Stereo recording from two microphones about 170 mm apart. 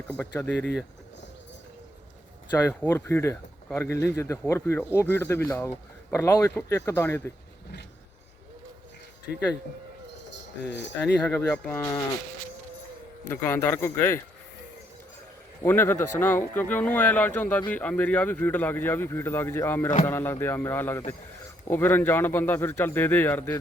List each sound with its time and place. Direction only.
0.2 s speech: 10° left (ahead or behind)
2.5 s speech: 15° left (ahead or behind)
11.0 s speech: 10° left (ahead or behind)
11.8 s speech: 15° left (ahead or behind)
13.2 s speech: 10° left (ahead or behind)
15.6 s speech: 10° left (ahead or behind)